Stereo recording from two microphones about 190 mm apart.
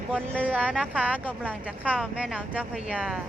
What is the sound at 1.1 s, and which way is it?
Speech, 10° left (ahead or behind).